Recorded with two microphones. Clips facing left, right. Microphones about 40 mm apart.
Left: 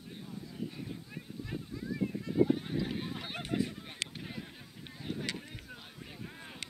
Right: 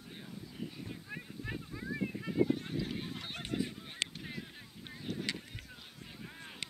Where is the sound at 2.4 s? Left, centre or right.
Centre.